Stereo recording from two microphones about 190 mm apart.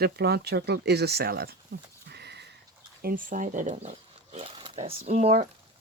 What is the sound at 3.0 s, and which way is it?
Speech, 50° right (ahead or behind).